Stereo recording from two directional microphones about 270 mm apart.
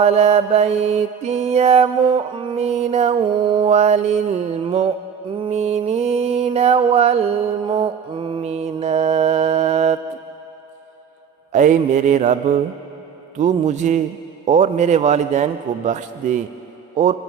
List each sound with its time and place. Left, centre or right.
0.0 s mantra: right
5.4 s music: right
7.7 s mantra: centre
11.5 s mantra: right